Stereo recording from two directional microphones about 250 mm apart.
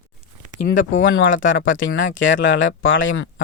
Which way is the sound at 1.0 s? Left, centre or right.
Left.